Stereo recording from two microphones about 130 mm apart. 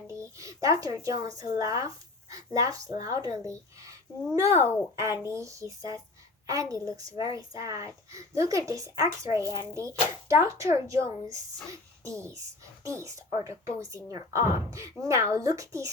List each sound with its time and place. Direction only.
0.1 s speech: 25° right (ahead or behind)
9.4 s speech: 35° left (ahead or behind)
9.7 s speech: 25° right (ahead or behind)